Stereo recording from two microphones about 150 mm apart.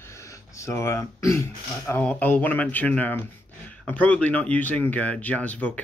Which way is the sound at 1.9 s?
10° left (ahead or behind).